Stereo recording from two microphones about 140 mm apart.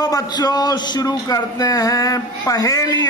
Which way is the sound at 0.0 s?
25° left (ahead or behind).